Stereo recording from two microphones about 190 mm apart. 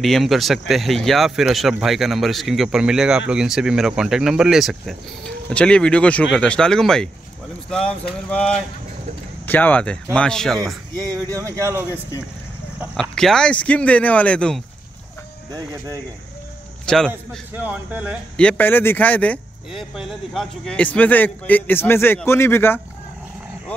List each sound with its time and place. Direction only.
0.0 s speech: centre (ahead or behind)
8.3 s a man's voice: 5° left (ahead or behind)
11.1 s speech: 20° right (ahead or behind)
12.9 s speech: 5° left (ahead or behind)
15.5 s speech: 20° right (ahead or behind)
16.8 s a man's voice: 5° left (ahead or behind)
17.6 s speech: 10° right (ahead or behind)
18.4 s a man's voice: 10° left (ahead or behind)